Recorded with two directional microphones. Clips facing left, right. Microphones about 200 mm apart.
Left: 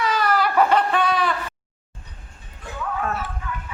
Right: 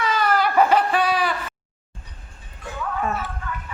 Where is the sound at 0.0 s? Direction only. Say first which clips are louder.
Even; centre (ahead or behind).